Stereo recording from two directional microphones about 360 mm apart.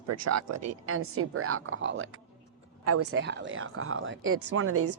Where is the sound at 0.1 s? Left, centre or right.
Right.